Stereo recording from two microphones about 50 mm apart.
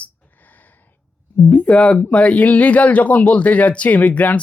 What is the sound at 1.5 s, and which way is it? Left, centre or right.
Speech, left.